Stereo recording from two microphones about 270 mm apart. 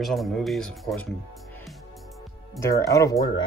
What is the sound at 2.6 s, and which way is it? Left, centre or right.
Speech, centre.